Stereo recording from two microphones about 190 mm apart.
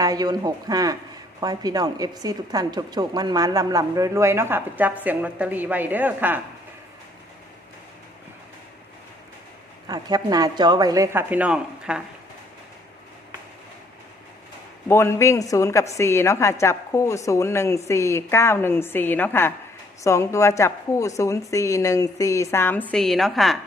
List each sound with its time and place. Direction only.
0.0 s a woman's voice: 20° right (ahead or behind)
9.9 s speech: 20° right (ahead or behind); by 12.0 s 5° right (ahead or behind)
14.8 s a woman's voice: 15° left (ahead or behind)